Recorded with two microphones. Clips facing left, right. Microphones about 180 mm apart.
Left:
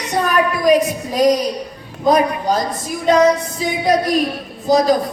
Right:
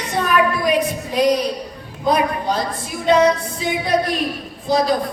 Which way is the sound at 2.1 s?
45° left (ahead or behind).